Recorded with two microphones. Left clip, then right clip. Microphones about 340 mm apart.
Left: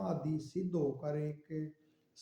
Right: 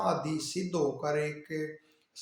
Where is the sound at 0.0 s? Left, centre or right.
Left.